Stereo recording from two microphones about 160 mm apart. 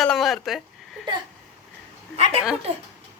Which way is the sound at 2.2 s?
40° right (ahead or behind).